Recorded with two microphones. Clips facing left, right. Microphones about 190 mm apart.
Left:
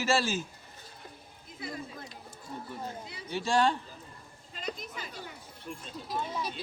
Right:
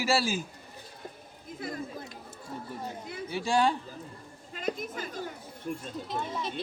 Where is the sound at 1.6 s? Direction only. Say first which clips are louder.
Right 3 dB; 50° right (ahead or behind).